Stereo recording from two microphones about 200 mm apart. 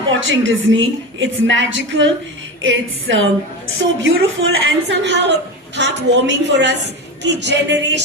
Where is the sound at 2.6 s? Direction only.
70° right (ahead or behind).